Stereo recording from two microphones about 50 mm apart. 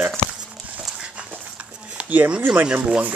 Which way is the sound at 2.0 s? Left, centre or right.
Right.